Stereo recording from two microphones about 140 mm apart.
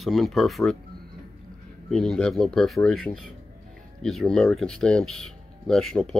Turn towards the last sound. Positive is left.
turn(degrees=5)  # may be behind; listen again after turning